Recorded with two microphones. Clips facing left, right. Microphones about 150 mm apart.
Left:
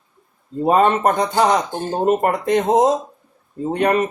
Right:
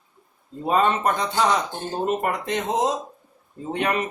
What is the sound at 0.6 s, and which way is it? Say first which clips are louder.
Speech: left 6 dB; 50° left (ahead or behind).